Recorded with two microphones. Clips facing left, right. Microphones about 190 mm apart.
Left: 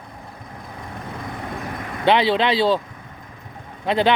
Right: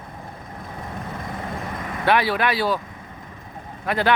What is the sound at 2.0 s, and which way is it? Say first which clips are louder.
Speech: left 3 dB; 20° left (ahead or behind).